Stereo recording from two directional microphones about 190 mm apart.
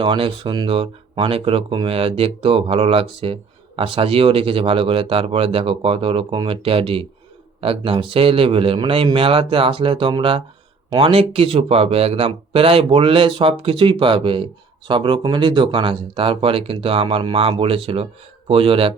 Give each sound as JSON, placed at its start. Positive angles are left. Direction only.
{"t": 0.0, "sound": "speech", "side_deg": -25}